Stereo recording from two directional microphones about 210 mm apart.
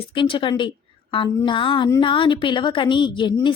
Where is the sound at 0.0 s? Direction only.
25° left (ahead or behind).